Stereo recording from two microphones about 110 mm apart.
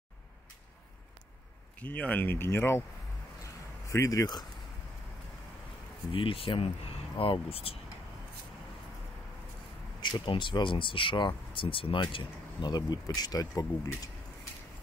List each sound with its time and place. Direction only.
1.8 s speech: 15° left (ahead or behind)
3.9 s speech: 30° left (ahead or behind)
6.1 s speech: 55° left (ahead or behind)
10.2 s speech: 50° left (ahead or behind)
12.6 s speech: 40° left (ahead or behind)